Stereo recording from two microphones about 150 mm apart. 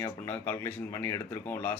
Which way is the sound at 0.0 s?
15° left (ahead or behind).